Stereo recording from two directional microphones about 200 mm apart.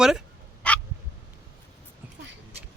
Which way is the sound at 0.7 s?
5° left (ahead or behind).